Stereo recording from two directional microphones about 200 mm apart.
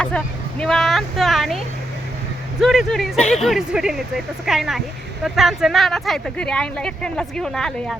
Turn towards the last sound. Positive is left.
turn(degrees=5)  # may be behind; listen again after turning